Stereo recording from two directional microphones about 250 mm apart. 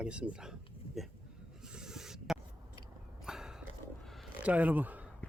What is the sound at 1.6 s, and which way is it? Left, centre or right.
Rub, centre.